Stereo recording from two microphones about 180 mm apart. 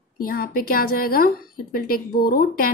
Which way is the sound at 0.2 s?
55° left (ahead or behind).